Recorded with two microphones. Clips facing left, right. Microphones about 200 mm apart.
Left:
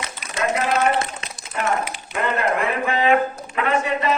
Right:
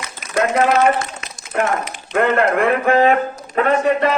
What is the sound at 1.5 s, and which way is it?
A man's voice, 60° right (ahead or behind).